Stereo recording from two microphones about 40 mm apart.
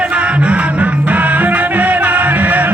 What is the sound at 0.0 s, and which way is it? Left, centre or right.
Music, right.